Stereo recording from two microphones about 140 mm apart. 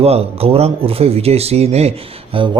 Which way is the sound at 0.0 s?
45° right (ahead or behind).